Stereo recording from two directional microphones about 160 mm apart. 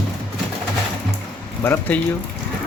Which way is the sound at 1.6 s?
15° left (ahead or behind).